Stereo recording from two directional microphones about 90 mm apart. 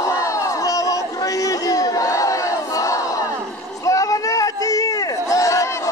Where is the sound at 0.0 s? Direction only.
35° left (ahead or behind).